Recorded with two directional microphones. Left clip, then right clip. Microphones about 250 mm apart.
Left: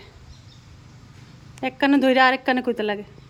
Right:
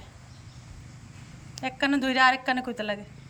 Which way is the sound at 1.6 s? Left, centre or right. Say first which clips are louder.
Left 7 dB; centre.